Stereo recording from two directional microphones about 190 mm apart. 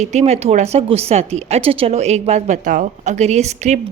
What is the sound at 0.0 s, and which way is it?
Speech, 35° right (ahead or behind).